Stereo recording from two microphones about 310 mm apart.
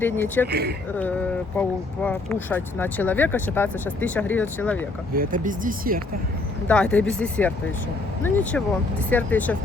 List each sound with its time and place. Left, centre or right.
0.0 s speech: centre
0.4 s speech: right
1.5 s speech: centre
5.1 s speech: right
6.7 s speech: centre